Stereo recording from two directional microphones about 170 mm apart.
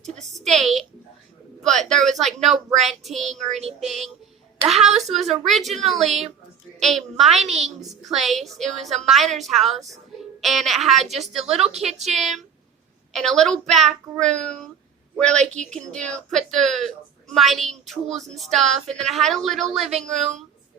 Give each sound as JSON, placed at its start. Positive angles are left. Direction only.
{"t": 0.3, "sound": "a sound", "side_deg": 0}
{"t": 2.7, "sound": "a woman's voice", "side_deg": 0}
{"t": 8.9, "sound": "a woman's voice", "side_deg": -40}
{"t": 9.1, "sound": "a woman's voice", "side_deg": 0}